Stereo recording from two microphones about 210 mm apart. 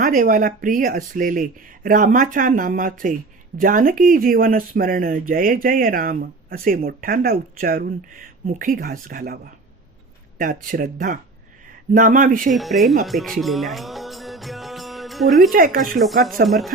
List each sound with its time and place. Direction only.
0.0 s speech: 40° right (ahead or behind)
12.5 s speech: centre (ahead or behind)
13.1 s music: centre (ahead or behind)
15.5 s speech: 45° right (ahead or behind)
16.0 s speech: centre (ahead or behind)